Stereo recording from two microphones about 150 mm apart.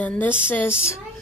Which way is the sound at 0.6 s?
5° right (ahead or behind).